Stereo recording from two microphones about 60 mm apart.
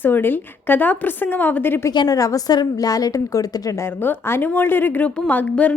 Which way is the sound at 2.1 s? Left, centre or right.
Left.